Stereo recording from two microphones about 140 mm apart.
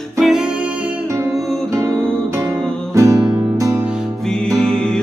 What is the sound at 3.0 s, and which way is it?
Music, 25° right (ahead or behind).